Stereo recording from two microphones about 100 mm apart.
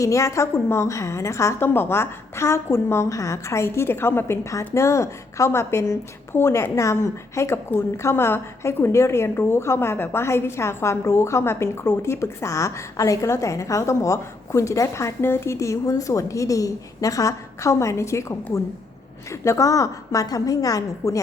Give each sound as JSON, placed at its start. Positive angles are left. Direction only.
{"t": 0.0, "sound": "a woman's voice", "side_deg": 30}